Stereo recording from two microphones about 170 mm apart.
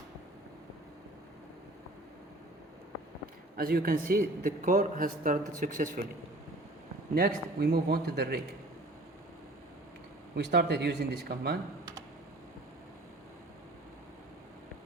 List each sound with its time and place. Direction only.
3.6 s a man's voice: 60° right (ahead or behind)
7.1 s a man's voice: 65° right (ahead or behind)
10.3 s speech: 85° right